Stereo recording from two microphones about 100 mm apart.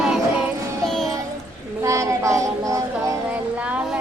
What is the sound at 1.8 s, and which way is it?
Music, 30° right (ahead or behind).